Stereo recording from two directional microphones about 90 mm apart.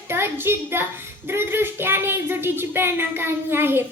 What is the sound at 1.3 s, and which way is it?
Speech, 25° right (ahead or behind).